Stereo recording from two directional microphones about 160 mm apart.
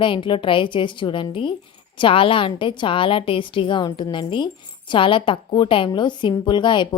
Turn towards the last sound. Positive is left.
turn(degrees=30)  # may be behind; listen again after turning